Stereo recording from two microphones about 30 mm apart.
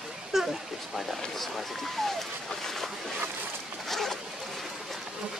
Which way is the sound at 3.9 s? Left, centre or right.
Centre.